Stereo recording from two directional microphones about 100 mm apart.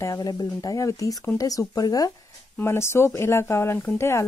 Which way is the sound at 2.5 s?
25° left (ahead or behind).